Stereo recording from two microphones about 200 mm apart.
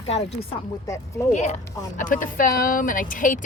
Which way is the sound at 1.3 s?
35° left (ahead or behind).